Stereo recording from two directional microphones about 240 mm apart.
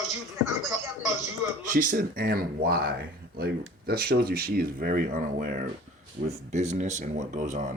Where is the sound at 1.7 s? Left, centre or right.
Right.